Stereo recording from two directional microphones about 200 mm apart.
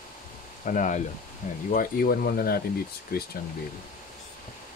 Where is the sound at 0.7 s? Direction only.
40° left (ahead or behind).